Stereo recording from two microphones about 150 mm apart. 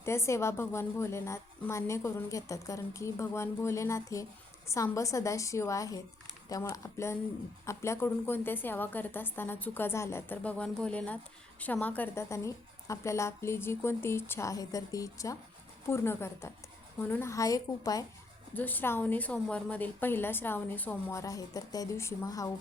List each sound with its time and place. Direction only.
0.0 s a woman's voice: 20° left (ahead or behind)
18.5 s a woman's voice: 10° left (ahead or behind)